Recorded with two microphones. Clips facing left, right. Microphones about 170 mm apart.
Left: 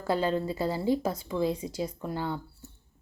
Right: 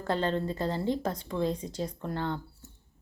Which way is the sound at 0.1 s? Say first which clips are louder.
Left 2 dB; 10° left (ahead or behind).